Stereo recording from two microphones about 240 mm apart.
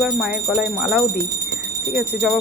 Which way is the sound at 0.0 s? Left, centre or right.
Centre.